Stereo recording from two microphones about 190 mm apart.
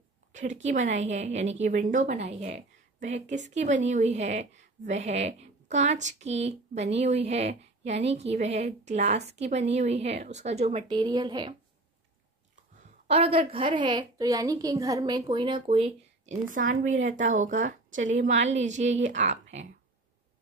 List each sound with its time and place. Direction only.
0.3 s a woman's voice: 40° right (ahead or behind)
10.9 s a woman's voice: 25° right (ahead or behind)
13.0 s a woman's voice: 30° right (ahead or behind)